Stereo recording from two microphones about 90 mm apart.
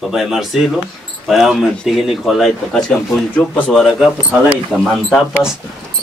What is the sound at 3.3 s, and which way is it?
A man's voice, 15° left (ahead or behind).